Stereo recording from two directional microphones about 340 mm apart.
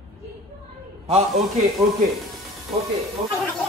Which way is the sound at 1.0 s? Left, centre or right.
Centre.